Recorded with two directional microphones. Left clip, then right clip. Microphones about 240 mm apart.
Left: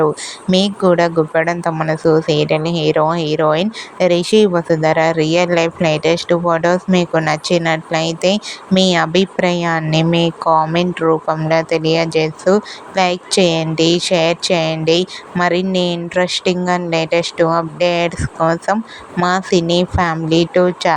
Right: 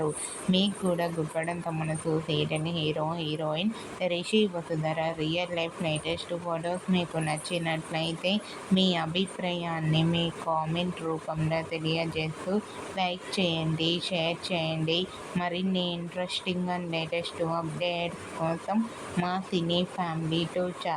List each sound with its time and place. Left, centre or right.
0.5 s speech: left